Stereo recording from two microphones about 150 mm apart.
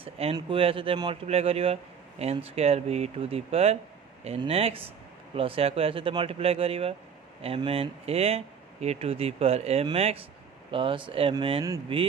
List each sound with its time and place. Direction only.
0.0 s speech: 40° right (ahead or behind)